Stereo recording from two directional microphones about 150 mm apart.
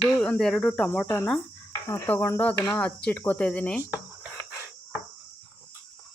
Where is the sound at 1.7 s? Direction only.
20° left (ahead or behind).